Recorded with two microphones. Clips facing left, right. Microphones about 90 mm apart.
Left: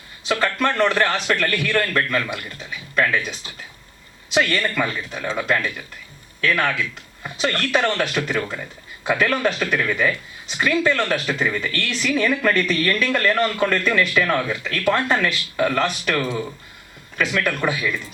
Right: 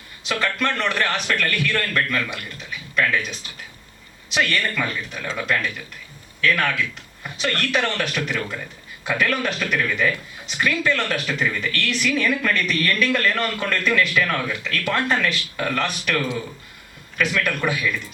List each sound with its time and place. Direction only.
0.3 s speech: 20° left (ahead or behind)
4.4 s speech: 20° left (ahead or behind)
17.2 s speech: 25° left (ahead or behind)